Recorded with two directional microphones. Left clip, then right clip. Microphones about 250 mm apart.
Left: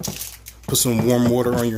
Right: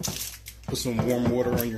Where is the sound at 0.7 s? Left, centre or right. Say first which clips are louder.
Left 8 dB; left.